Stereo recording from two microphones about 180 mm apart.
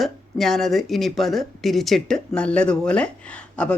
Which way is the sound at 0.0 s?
Centre (ahead or behind).